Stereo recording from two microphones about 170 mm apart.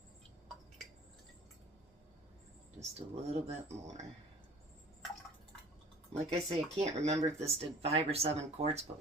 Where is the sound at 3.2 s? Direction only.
40° right (ahead or behind).